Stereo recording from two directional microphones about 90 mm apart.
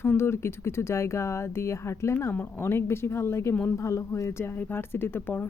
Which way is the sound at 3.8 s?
35° left (ahead or behind).